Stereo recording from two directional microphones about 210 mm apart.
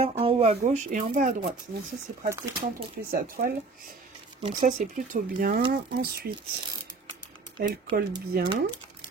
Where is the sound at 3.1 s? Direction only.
45° right (ahead or behind).